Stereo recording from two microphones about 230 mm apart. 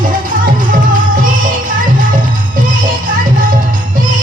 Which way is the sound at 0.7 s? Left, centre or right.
Right.